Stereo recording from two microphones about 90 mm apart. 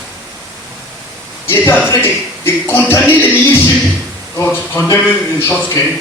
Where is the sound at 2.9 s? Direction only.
25° left (ahead or behind).